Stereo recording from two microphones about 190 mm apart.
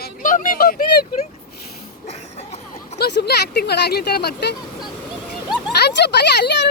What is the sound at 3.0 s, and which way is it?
Speech, 55° left (ahead or behind).